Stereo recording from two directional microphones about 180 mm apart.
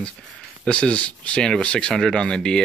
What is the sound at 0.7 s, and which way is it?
Speech, 5° left (ahead or behind).